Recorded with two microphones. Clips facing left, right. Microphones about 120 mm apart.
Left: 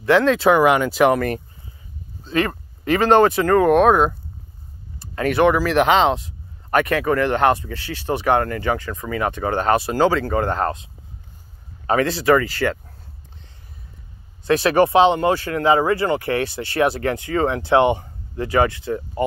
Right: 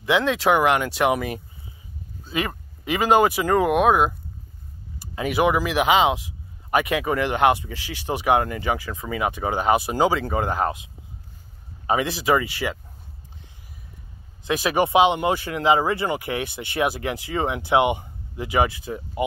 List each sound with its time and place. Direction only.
0.0 s speech: centre (ahead or behind)
14.5 s speech: 10° right (ahead or behind)